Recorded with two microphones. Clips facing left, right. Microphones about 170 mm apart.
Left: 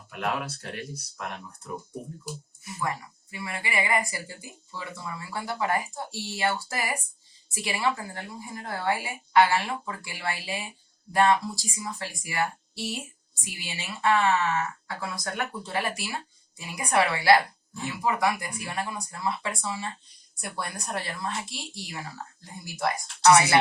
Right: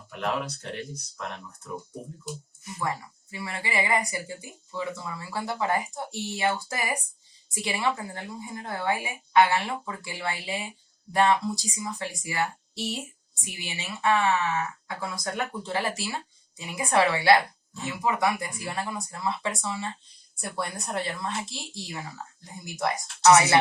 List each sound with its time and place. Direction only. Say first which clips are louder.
0.2 s speech: right 1 dB; 5° left (ahead or behind)
3.3 s speech: right 1 dB; 25° right (ahead or behind)